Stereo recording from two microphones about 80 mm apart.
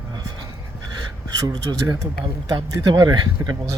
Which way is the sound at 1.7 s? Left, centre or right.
Right.